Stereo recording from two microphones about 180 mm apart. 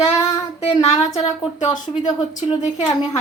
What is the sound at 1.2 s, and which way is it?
Speech, 40° left (ahead or behind).